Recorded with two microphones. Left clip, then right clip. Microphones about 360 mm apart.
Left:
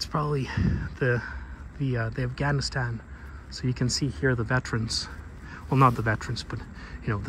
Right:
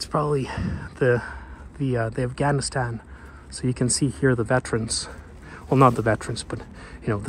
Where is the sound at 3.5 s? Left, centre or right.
Centre.